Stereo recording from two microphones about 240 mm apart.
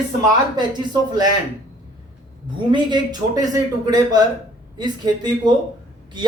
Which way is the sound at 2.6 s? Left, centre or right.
Centre.